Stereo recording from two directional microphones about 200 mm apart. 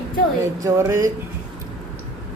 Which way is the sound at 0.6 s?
15° right (ahead or behind).